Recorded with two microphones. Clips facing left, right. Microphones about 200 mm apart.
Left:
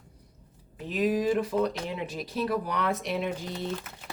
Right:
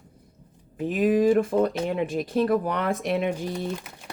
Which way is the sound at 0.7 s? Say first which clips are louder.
Right 5 dB; 50° right (ahead or behind).